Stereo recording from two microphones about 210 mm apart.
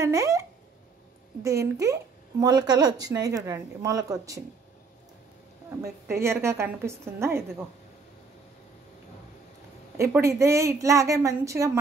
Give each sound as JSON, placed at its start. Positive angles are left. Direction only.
{"t": 0.0, "sound": "a woman's voice", "side_deg": -15}
{"t": 6.0, "sound": "a woman's voice", "side_deg": -10}
{"t": 9.9, "sound": "a woman's voice", "side_deg": -15}